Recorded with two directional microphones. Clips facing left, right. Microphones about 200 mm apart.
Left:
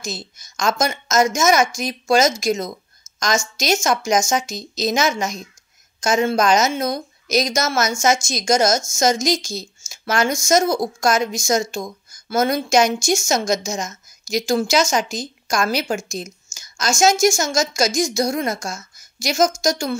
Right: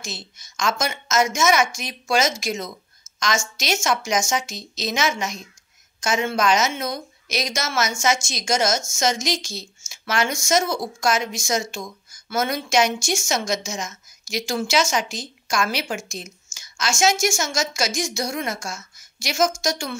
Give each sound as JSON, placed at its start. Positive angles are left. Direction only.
{"t": 0.0, "sound": "speech", "side_deg": 40}